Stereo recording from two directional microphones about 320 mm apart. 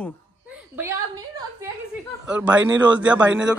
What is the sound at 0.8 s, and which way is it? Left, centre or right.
A woman's voice, centre.